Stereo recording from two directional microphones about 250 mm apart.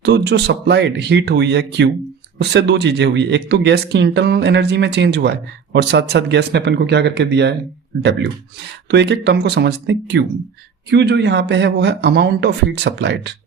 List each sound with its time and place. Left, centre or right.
0.0 s speech: right
8.9 s speech: right